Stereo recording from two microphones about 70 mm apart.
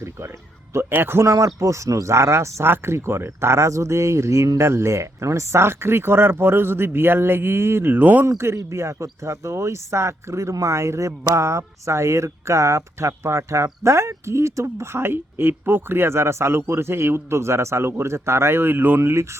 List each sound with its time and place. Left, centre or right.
0.0 s speech: right
1.2 s speech: right
8.5 s speech: right